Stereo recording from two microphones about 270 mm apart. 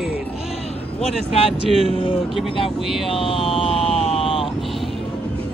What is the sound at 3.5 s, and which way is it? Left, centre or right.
Vehicle, centre.